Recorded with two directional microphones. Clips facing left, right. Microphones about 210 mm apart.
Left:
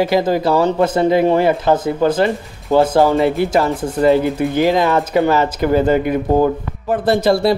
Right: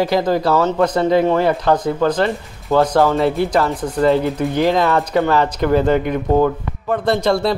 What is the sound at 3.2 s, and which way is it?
Speech, centre (ahead or behind).